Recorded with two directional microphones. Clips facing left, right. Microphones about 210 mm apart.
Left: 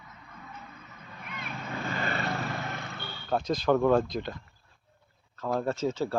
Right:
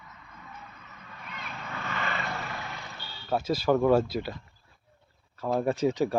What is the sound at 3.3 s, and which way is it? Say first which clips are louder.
Speech: even; 5° right (ahead or behind).